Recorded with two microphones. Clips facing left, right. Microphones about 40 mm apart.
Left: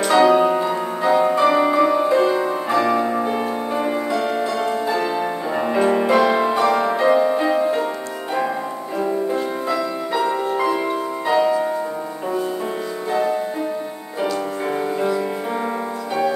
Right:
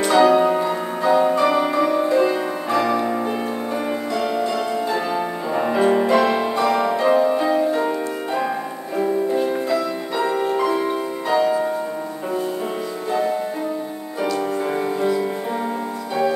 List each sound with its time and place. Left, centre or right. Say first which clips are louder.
0.0 s music: even; centre
0.3 s music: left 1 dB; centre
5.1 s music: even; centre
11.2 s music: left 1 dB; centre